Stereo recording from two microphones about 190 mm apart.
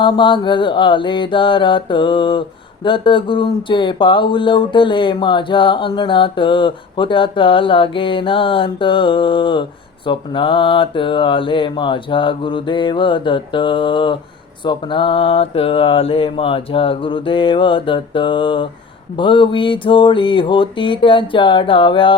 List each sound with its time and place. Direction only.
0.0 s speech: 25° left (ahead or behind)